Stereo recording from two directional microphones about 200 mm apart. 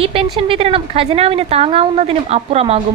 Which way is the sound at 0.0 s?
30° right (ahead or behind).